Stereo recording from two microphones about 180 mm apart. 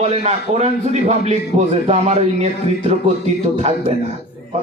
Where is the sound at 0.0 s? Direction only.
35° right (ahead or behind).